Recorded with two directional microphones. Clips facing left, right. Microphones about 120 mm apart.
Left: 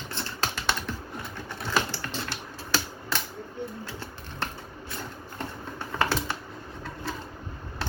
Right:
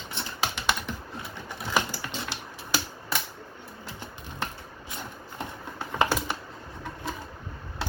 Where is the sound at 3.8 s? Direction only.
15° right (ahead or behind).